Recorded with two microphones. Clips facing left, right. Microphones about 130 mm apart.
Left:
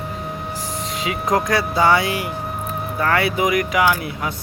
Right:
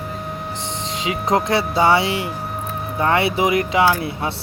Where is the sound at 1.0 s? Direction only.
25° right (ahead or behind).